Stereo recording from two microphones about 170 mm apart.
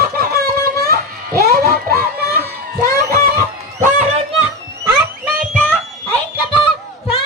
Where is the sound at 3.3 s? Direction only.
50° right (ahead or behind).